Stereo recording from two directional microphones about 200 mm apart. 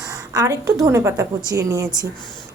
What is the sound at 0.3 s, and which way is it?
A woman's voice, 15° right (ahead or behind).